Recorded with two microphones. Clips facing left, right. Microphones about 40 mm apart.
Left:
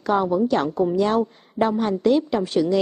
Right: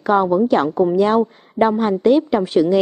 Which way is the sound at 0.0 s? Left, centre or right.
Centre.